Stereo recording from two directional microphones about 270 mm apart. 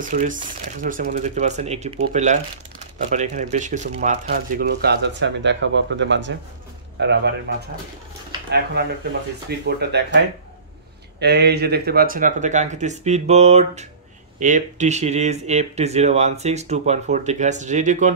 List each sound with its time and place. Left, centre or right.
0.0 s speech: right
9.8 s speech: right